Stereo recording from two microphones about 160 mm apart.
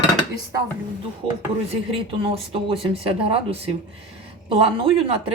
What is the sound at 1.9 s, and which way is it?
Speech, 35° right (ahead or behind).